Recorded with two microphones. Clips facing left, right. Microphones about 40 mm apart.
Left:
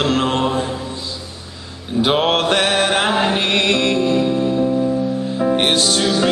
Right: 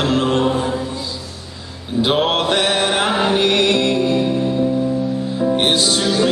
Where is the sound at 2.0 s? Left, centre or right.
Centre.